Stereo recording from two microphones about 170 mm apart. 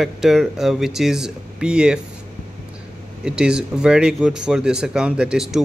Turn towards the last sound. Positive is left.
turn(degrees=-5)  # may be behind; listen again after turning